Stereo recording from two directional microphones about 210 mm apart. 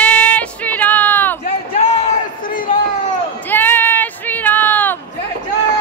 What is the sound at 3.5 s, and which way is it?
Child singing, 10° left (ahead or behind).